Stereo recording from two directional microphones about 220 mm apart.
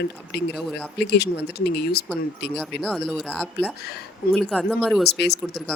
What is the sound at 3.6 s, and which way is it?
Speech, 50° left (ahead or behind).